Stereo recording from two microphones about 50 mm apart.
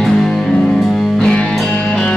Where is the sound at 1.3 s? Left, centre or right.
Centre.